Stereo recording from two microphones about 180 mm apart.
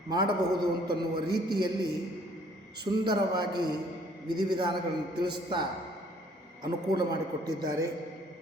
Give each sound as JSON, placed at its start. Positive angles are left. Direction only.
{"t": 0.1, "sound": "a man's voice", "side_deg": -25}
{"t": 3.0, "sound": "a man's voice", "side_deg": -25}